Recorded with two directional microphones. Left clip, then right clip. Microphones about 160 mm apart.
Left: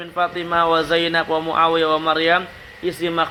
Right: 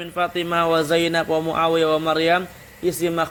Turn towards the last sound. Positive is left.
turn(degrees=-30)  # may be behind; listen again after turning